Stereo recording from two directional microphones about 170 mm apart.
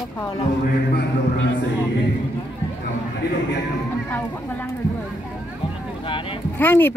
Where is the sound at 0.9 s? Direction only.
90° left.